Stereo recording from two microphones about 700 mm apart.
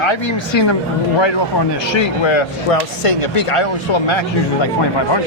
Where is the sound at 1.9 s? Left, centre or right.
Left.